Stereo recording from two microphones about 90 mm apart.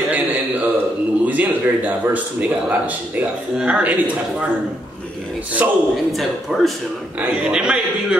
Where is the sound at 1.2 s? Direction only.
15° right (ahead or behind).